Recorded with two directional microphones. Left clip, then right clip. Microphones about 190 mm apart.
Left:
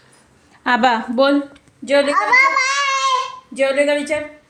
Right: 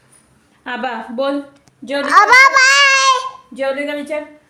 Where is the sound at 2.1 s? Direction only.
40° right (ahead or behind).